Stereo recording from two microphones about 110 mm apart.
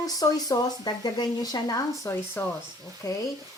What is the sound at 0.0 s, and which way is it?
Speech, 35° left (ahead or behind).